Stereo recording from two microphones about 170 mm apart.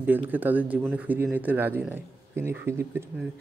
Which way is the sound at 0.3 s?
10° right (ahead or behind).